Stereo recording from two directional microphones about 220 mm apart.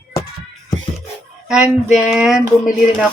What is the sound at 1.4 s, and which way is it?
Speech, 5° right (ahead or behind).